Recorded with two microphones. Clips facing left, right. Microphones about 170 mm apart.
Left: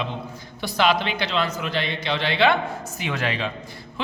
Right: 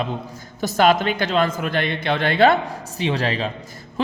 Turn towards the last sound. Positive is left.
turn(degrees=-40)  # may be behind; listen again after turning